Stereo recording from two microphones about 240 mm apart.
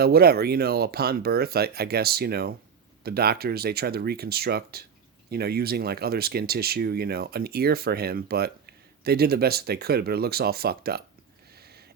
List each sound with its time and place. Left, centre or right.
0.0 s speech: right